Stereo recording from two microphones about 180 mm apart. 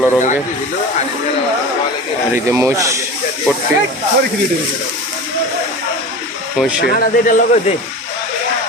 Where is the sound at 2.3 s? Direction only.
15° right (ahead or behind).